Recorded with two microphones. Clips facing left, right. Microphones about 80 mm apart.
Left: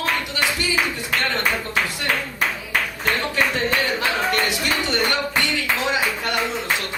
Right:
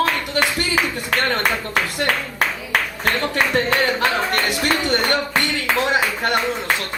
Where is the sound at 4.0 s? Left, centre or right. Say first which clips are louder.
Right 2 dB; right.